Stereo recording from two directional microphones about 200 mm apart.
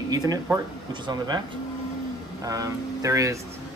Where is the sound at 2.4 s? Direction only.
15° right (ahead or behind).